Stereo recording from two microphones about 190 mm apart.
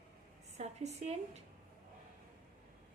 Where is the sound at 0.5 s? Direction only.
35° right (ahead or behind).